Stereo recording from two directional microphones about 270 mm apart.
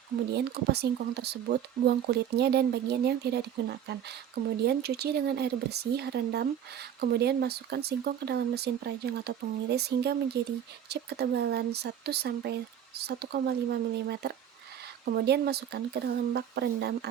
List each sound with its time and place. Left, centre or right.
0.3 s speech: right